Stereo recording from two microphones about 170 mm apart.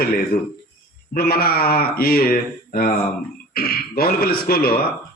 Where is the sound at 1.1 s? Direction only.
65° left (ahead or behind).